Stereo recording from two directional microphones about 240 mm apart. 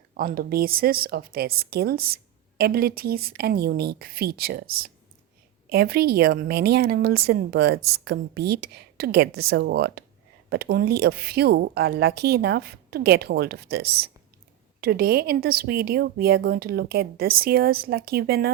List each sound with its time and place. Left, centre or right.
0.1 s a woman's voice: right
5.6 s a woman's voice: right